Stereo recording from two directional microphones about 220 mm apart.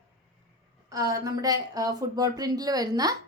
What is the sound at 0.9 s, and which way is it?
Speech, 15° right (ahead or behind).